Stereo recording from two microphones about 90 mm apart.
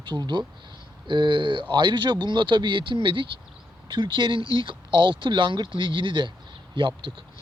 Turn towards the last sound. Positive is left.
turn(degrees=-70)  # may be behind; listen again after turning